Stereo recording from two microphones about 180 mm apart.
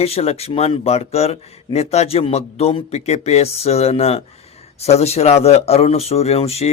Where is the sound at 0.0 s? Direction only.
35° left (ahead or behind).